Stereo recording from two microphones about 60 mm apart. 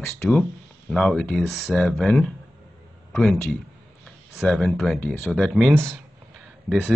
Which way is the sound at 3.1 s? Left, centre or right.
Centre.